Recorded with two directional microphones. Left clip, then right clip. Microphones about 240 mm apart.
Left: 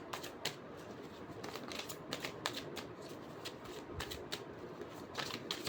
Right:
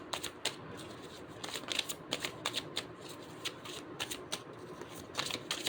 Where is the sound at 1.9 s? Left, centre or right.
Centre.